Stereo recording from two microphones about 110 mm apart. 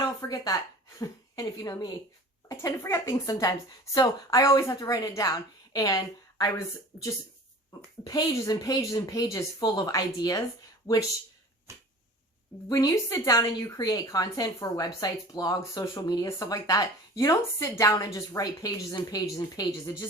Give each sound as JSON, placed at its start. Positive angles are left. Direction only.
{"t": 0.2, "sound": "a woman's voice", "side_deg": 35}
{"t": 8.0, "sound": "a woman's voice", "side_deg": 30}
{"t": 12.7, "sound": "a woman's voice", "side_deg": 35}